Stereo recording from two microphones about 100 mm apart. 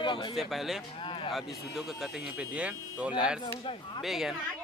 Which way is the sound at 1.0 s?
65° left (ahead or behind).